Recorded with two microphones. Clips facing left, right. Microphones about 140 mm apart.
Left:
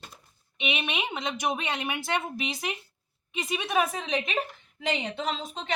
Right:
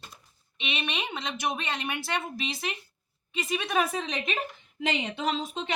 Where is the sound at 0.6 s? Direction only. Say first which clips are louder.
Left 2 dB; 10° left (ahead or behind).